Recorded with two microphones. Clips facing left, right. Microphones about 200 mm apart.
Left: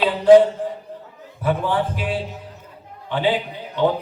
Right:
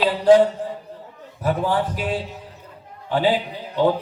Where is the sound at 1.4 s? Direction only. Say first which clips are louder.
Even; 40° right (ahead or behind).